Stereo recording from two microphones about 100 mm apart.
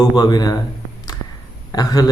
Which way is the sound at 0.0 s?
45° left (ahead or behind).